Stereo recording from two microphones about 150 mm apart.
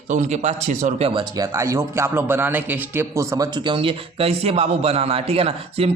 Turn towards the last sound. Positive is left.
turn(degrees=-40)  # may be behind; listen again after turning